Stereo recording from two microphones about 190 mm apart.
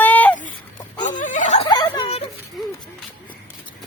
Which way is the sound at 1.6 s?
25° left (ahead or behind).